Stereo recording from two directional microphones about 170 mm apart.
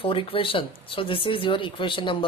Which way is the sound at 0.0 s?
30° left (ahead or behind).